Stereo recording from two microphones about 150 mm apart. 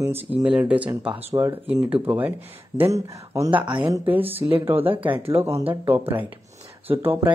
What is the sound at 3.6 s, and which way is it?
Speech, 30° right (ahead or behind).